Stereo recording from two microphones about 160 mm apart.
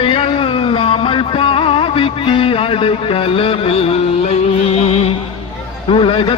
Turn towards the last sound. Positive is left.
turn(degrees=35)  # may be behind; listen again after turning